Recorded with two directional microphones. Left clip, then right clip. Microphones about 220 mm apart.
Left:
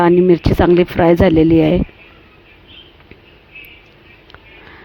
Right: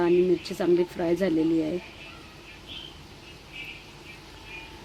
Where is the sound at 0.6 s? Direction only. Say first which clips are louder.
Left 13 dB; 40° left (ahead or behind).